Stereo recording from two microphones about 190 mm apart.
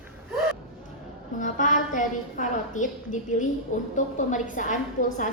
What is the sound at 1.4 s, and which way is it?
A woman's voice, 40° left (ahead or behind).